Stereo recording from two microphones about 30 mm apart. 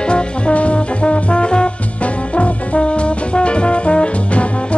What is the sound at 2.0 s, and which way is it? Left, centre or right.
Brass instrument, left.